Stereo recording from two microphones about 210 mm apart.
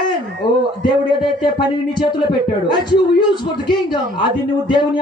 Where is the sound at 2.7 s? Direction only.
20° left (ahead or behind).